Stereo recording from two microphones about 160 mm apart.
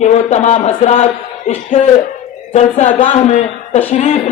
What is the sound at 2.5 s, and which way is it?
Speech, 45° left (ahead or behind).